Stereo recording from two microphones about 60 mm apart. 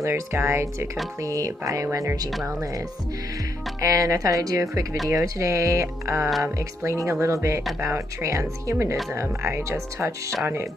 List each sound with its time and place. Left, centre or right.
0.1 s speech: right
1.2 s speech: right
3.8 s speech: right
5.1 s speech: right